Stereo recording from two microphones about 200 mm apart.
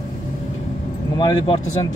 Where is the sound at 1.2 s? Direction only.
20° left (ahead or behind).